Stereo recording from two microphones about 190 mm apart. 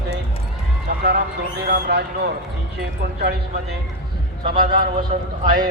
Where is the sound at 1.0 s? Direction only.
55° right (ahead or behind).